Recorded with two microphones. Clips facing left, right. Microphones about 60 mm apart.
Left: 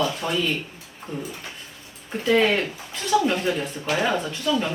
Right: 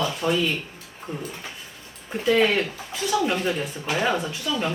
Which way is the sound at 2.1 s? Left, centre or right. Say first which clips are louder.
Even; centre.